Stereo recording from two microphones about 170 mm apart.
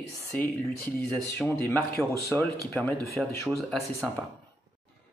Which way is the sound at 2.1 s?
20° right (ahead or behind).